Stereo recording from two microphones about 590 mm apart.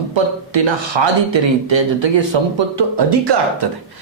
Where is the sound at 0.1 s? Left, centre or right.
Right.